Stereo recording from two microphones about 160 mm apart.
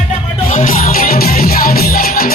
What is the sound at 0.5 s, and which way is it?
Music, 60° left (ahead or behind).